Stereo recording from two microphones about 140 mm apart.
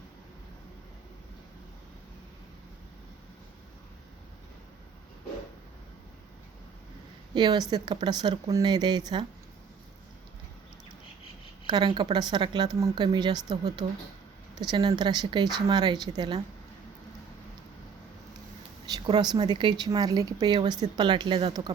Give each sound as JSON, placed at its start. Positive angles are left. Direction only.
{"t": 7.3, "sound": "a woman's voice", "side_deg": -30}
{"t": 11.7, "sound": "a woman's voice", "side_deg": -30}
{"t": 18.9, "sound": "speech", "side_deg": -30}